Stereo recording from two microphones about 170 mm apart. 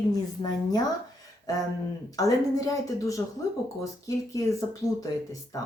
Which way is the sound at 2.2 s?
20° left (ahead or behind).